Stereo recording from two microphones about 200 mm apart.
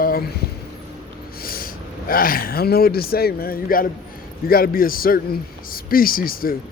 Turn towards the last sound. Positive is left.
turn(degrees=45)  # may be behind; listen again after turning